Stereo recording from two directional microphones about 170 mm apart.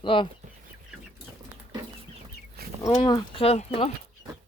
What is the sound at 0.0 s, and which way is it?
Speech, 30° left (ahead or behind).